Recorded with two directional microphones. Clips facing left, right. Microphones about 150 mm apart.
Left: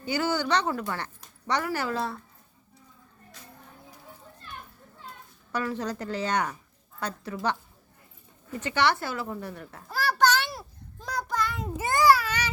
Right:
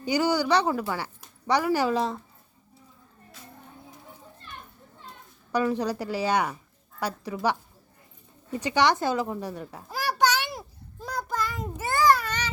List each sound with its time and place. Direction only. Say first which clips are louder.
0.0 s speech: right 3 dB; 15° right (ahead or behind)
5.5 s speech: right 5 dB; 15° right (ahead or behind)
8.5 s a child's voice: right 3 dB; 15° right (ahead or behind)
11.0 s child singing: even; 5° right (ahead or behind)
11.8 s a sound: left 1 dB; 15° left (ahead or behind)
12.1 s baby cry: left 1 dB; 5° left (ahead or behind)